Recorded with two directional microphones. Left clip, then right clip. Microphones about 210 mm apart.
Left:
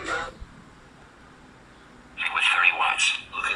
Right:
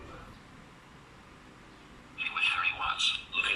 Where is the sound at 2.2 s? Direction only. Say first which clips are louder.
Left 8 dB; 25° left (ahead or behind).